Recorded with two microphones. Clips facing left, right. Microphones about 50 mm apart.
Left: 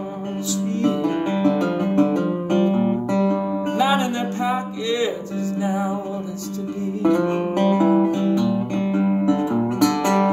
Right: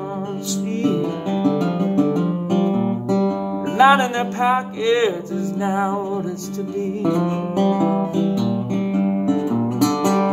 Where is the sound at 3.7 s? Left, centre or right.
Right.